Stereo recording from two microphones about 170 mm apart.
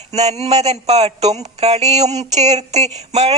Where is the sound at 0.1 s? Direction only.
40° right (ahead or behind).